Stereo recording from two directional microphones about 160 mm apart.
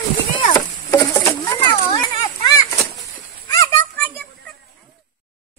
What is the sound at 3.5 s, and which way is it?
Children playing, 15° left (ahead or behind).